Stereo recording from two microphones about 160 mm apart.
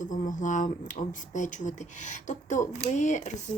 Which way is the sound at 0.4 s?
50° left (ahead or behind).